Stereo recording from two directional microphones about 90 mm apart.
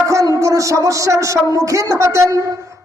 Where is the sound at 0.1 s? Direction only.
35° right (ahead or behind).